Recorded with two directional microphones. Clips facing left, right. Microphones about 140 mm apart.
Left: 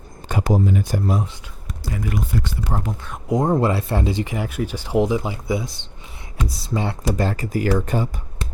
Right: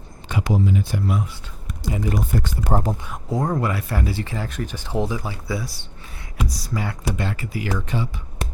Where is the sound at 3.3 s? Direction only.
25° left (ahead or behind); by 8.1 s 45° left (ahead or behind).